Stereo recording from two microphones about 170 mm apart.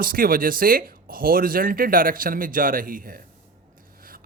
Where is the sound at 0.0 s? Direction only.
55° right (ahead or behind).